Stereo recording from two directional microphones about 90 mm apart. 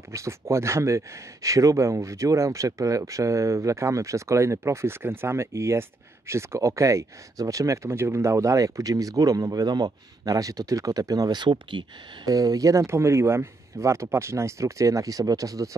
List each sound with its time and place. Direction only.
0.1 s speech: 35° right (ahead or behind); by 11.8 s 60° right (ahead or behind)
12.3 s speech: 45° right (ahead or behind)